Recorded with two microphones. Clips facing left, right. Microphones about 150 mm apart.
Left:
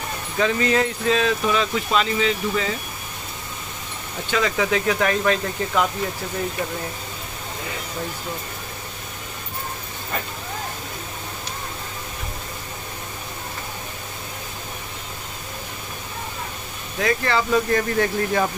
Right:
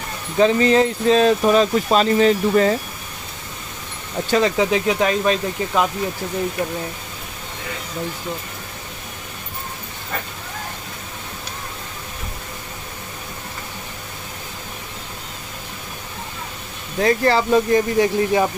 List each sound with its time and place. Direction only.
0.4 s speech: 30° right (ahead or behind); by 2.7 s 45° right (ahead or behind)
4.3 s speech: 30° right (ahead or behind)
17.0 s speech: 35° right (ahead or behind)
17.7 s speech: 15° right (ahead or behind)